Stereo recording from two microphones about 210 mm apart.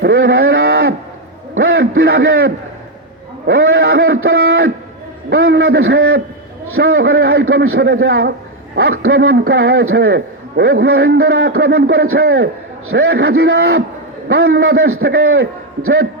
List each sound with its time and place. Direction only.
0.0 s a sound: 65° right (ahead or behind)
3.4 s a man's voice: 60° right (ahead or behind)
9.1 s a man's voice: 70° right (ahead or behind)
14.3 s a man's voice: 70° right (ahead or behind)